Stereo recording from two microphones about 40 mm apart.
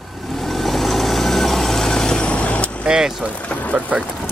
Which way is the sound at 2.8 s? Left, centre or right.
Centre.